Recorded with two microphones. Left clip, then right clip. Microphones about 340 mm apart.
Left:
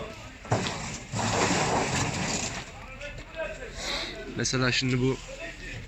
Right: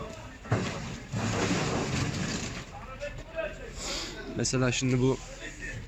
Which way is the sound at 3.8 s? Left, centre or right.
Centre.